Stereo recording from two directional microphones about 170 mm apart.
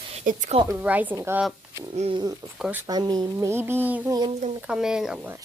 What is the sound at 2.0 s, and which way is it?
Speech, 35° right (ahead or behind).